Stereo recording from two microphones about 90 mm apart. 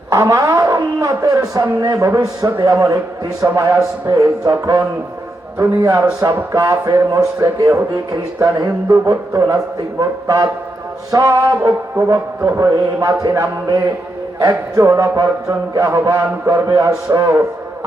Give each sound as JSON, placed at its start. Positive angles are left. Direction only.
{"t": 0.1, "sound": "music", "side_deg": -35}
{"t": 8.1, "sound": "a man's voice", "side_deg": -45}
{"t": 10.0, "sound": "music", "side_deg": -40}
{"t": 14.3, "sound": "music", "side_deg": -35}